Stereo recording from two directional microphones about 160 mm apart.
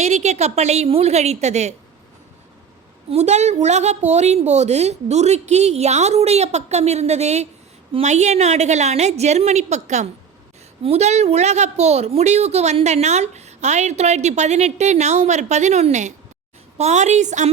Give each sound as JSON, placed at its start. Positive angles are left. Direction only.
{"t": 0.0, "sound": "a woman's voice", "side_deg": -45}
{"t": 3.1, "sound": "a woman's voice", "side_deg": -45}